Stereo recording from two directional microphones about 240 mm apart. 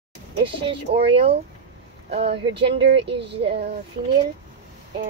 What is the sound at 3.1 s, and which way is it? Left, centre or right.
Speech, right.